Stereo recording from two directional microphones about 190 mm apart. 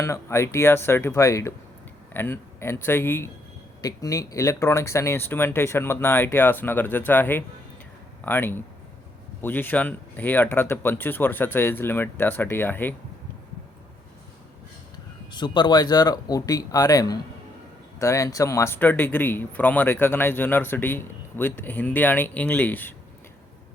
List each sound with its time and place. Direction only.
0.0 s speech: 15° left (ahead or behind)
15.3 s speech: 25° left (ahead or behind)